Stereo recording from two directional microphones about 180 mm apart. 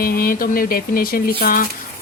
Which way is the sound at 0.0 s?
55° left (ahead or behind).